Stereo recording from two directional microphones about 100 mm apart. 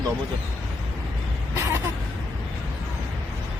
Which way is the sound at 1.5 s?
30° right (ahead or behind).